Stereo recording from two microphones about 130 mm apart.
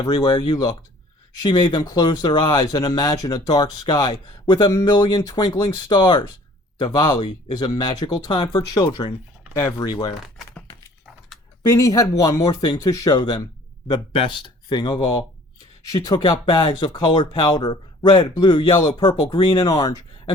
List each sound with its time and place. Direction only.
0.0 s speech: 30° left (ahead or behind)
11.7 s speech: 25° left (ahead or behind)
16.2 s speech: 40° left (ahead or behind)